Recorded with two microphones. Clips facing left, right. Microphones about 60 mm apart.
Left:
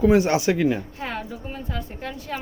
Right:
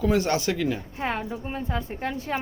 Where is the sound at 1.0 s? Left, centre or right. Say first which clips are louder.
Right 2 dB; right.